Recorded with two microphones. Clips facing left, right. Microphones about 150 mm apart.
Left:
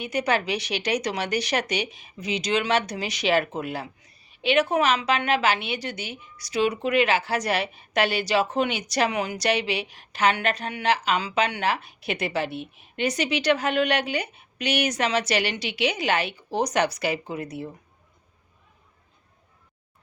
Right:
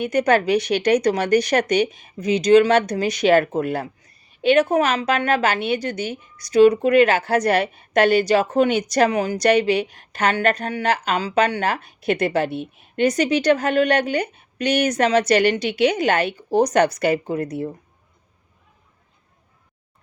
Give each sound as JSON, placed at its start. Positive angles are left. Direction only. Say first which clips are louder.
{"t": 0.0, "sound": "a woman's voice", "louder": "right 7 dB", "side_deg": -50}